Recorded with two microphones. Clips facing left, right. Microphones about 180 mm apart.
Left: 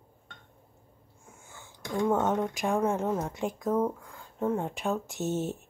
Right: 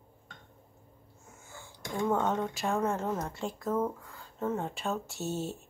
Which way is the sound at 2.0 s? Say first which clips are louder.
Left 3 dB; 15° left (ahead or behind).